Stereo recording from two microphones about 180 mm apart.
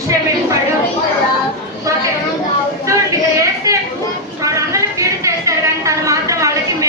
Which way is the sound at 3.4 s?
15° right (ahead or behind).